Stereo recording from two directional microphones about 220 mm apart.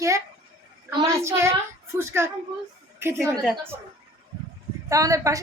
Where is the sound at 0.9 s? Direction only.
15° right (ahead or behind).